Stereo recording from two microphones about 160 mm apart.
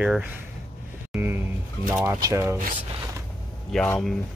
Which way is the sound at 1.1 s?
15° right (ahead or behind).